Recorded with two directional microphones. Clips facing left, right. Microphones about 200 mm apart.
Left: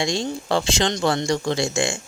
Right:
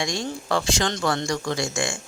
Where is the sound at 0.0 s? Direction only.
25° left (ahead or behind).